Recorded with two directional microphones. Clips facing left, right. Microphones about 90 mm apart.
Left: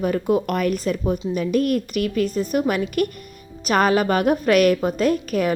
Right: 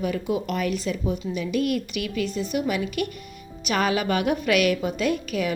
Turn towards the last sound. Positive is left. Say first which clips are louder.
# left 5 dB
turn(degrees=45)  # may be behind; listen again after turning